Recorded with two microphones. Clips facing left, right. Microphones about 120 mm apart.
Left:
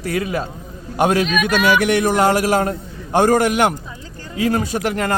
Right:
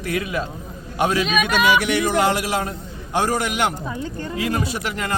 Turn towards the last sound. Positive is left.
turn(degrees=45)  # may be behind; listen again after turning